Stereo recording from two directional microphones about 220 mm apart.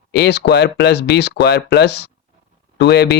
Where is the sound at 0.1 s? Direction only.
50° left (ahead or behind).